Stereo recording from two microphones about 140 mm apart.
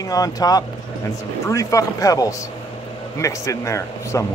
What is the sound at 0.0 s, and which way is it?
Speech, 25° left (ahead or behind).